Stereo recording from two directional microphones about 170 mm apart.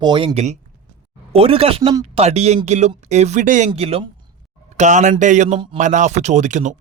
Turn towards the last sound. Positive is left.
turn(degrees=-45)  # may be behind; listen again after turning